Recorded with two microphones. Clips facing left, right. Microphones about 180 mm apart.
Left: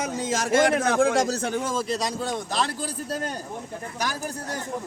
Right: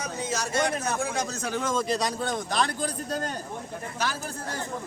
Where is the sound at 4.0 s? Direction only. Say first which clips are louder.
Left 2 dB; 15° left (ahead or behind).